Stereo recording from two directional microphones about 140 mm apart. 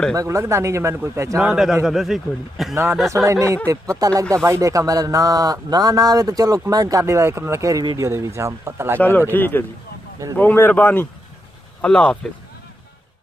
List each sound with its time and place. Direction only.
0.1 s speech: 25° right (ahead or behind)
1.4 s speech: 5° right (ahead or behind)
2.7 s speech: 20° right (ahead or behind)
9.3 s speech: 15° left (ahead or behind)